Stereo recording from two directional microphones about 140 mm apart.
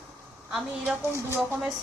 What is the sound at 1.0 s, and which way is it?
Speech, 20° right (ahead or behind).